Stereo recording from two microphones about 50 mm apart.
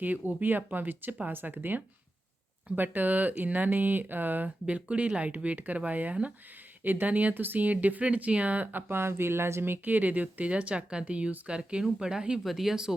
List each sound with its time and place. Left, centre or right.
0.0 s speech: right
4.6 s speech: right
12.4 s speech: centre